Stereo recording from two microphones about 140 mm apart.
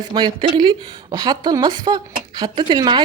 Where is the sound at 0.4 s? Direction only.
35° right (ahead or behind).